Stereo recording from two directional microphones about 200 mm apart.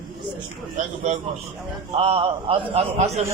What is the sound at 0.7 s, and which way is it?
A man's voice, 35° right (ahead or behind).